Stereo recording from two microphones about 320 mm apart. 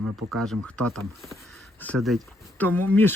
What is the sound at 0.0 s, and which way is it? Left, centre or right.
Speech, right.